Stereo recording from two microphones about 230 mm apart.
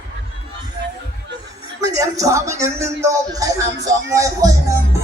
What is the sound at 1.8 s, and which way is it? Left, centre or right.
Speech, centre.